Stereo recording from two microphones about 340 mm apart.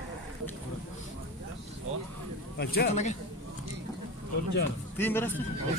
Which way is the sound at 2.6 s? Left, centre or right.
Left.